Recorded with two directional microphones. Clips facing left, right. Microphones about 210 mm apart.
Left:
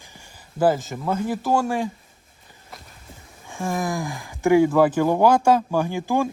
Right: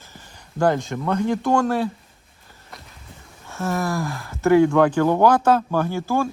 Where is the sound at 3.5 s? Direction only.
15° left (ahead or behind).